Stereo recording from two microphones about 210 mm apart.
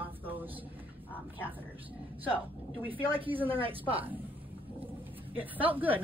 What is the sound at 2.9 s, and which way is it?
A woman's voice, 25° right (ahead or behind).